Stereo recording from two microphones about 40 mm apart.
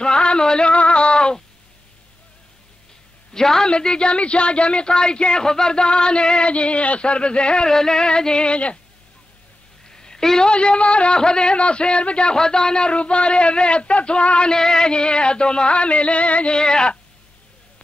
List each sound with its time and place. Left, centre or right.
0.0 s a sound: left
3.3 s a woman's voice: centre
7.7 s a man's voice: centre
9.8 s a sound: centre
10.5 s a man's voice: left
16.5 s a man's voice: left